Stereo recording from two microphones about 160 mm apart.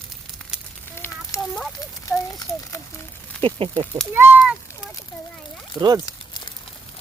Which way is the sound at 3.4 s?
35° right (ahead or behind).